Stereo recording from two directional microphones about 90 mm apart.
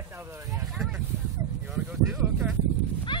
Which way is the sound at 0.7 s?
10° right (ahead or behind).